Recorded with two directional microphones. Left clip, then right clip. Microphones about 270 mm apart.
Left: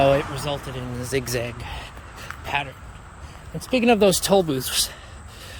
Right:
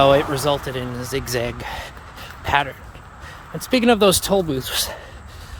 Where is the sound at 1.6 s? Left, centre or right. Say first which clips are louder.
Right 5 dB; centre.